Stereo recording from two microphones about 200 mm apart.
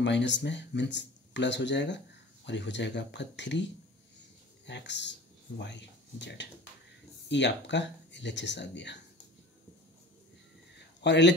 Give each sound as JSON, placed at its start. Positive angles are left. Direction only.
{"t": 0.0, "sound": "speech", "side_deg": 60}
{"t": 4.6, "sound": "speech", "side_deg": 60}
{"t": 11.0, "sound": "a man's voice", "side_deg": 60}